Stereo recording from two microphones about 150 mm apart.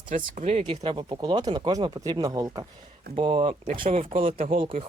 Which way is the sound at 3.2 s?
35° right (ahead or behind).